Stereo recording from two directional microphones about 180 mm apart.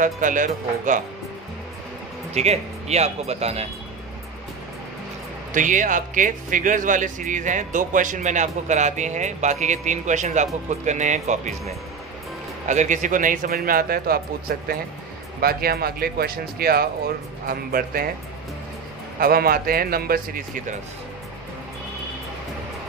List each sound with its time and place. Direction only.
0.0 s speech: 45° right (ahead or behind)
2.3 s speech: 35° right (ahead or behind)
5.5 s speech: 45° right (ahead or behind)
12.6 s speech: 40° right (ahead or behind)
19.1 s speech: 55° right (ahead or behind)